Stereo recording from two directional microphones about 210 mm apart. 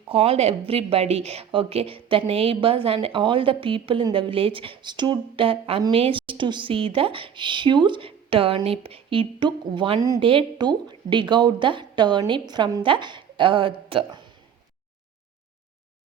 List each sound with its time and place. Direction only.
0.1 s speech: 25° right (ahead or behind)